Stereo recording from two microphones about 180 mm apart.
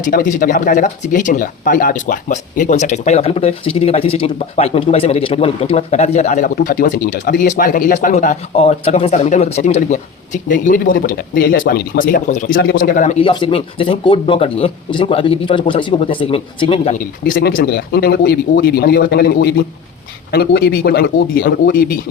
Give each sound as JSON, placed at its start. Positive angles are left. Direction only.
{"t": 0.0, "sound": "speech", "side_deg": 45}
{"t": 13.1, "sound": "a man's voice", "side_deg": 30}